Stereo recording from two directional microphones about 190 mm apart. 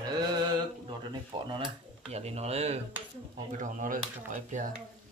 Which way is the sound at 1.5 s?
30° right (ahead or behind).